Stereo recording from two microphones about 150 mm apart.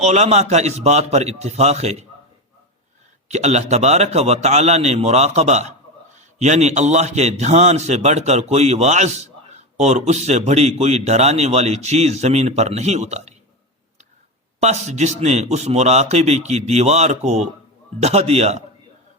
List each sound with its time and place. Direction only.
0.0 s a man's voice: 50° right (ahead or behind)
3.2 s a man's voice: 50° right (ahead or behind)
14.6 s a man's voice: 50° right (ahead or behind)